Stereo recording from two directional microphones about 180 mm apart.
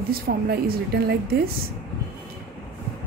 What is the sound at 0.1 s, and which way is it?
A woman's voice, 55° right (ahead or behind).